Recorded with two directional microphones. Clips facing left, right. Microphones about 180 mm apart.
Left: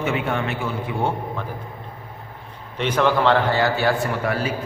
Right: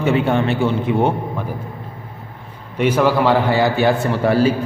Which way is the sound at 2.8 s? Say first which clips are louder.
Right 4 dB; 10° right (ahead or behind).